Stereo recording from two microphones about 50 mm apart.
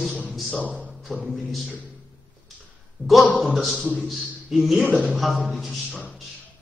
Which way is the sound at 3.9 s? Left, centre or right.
Centre.